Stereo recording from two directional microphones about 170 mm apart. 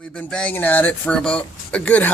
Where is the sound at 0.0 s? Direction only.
5° left (ahead or behind).